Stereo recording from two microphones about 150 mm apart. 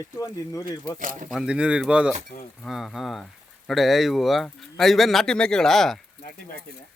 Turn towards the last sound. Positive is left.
turn(degrees=0)  # may be behind; listen again after turning